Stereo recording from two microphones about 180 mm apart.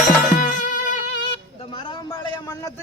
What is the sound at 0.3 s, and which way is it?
Music, 45° left (ahead or behind).